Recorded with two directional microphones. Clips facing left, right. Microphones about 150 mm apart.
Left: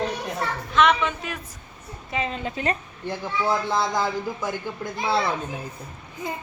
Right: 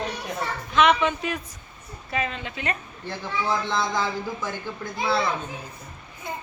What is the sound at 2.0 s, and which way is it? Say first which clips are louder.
Speech: even; 20° left (ahead or behind).